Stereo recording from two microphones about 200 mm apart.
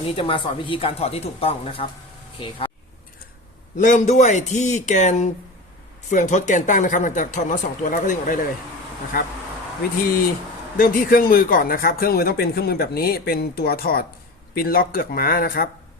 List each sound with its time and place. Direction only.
0.2 s a woman's voice: 25° left (ahead or behind)
3.8 s speech: 40° left (ahead or behind)
10.8 s speech: 45° left (ahead or behind)